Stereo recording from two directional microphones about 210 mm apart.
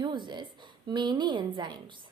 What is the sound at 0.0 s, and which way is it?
A woman's voice, 20° right (ahead or behind).